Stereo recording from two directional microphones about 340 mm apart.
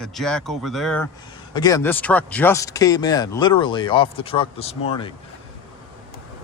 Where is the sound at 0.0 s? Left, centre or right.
Centre.